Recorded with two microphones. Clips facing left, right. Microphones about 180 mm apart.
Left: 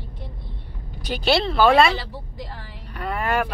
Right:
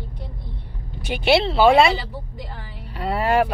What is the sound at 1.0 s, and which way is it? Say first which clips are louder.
Speech: right 3 dB; 25° right (ahead or behind).